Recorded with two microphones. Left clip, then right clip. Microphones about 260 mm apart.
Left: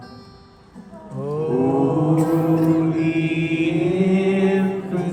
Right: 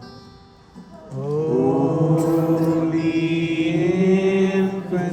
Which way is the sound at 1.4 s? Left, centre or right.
Right.